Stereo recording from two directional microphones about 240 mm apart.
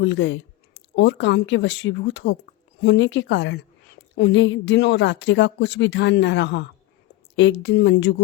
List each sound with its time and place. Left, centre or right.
0.0 s a woman's voice: left